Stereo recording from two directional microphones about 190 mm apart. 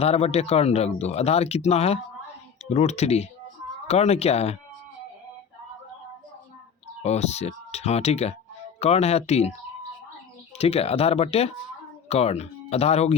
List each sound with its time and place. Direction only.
0.0 s speech: 30° left (ahead or behind)
7.0 s speech: 35° left (ahead or behind)
10.6 s speech: 30° left (ahead or behind)